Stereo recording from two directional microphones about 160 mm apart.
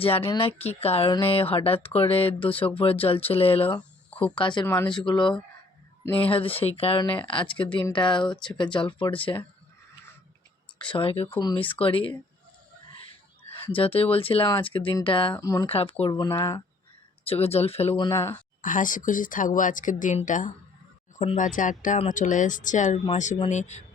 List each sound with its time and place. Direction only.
0.0 s speech: 35° left (ahead or behind)
3.8 s a sound: 10° left (ahead or behind)
4.4 s speech: 30° left (ahead or behind)
4.6 s speech: 15° left (ahead or behind)
4.9 s speech: 30° left (ahead or behind)
10.8 s speech: 30° left (ahead or behind)
13.7 s speech: 35° left (ahead or behind)
15.4 s speech: 20° left (ahead or behind)
15.7 s speech: 35° left (ahead or behind)
16.1 s speech: 25° left (ahead or behind)
17.2 s speech: 40° left (ahead or behind)
17.9 s speech: 25° left (ahead or behind)
18.6 s speech: 55° left (ahead or behind)